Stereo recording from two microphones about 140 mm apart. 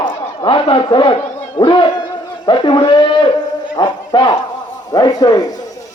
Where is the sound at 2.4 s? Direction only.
35° left (ahead or behind).